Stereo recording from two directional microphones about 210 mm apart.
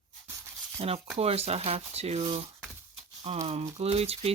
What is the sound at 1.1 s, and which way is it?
Speech, 30° right (ahead or behind).